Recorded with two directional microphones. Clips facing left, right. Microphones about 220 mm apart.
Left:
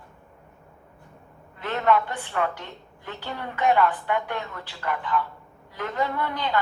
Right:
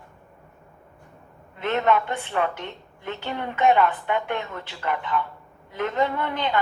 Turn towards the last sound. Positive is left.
turn(degrees=-20)  # may be behind; listen again after turning